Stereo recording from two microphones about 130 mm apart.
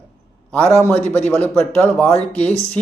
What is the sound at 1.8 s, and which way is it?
Speech, 15° left (ahead or behind).